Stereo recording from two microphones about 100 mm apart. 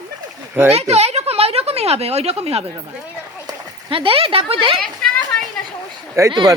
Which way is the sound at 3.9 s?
60° right (ahead or behind).